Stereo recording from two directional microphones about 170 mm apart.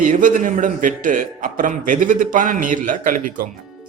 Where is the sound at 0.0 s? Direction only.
50° right (ahead or behind).